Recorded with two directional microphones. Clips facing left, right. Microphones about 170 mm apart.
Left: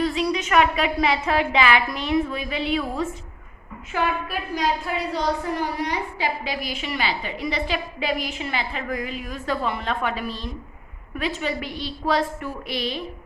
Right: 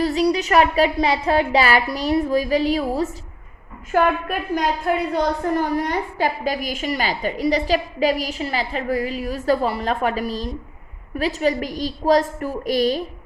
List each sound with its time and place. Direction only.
0.0 s a woman's voice: 40° right (ahead or behind)
3.9 s a woman's voice: 50° right (ahead or behind)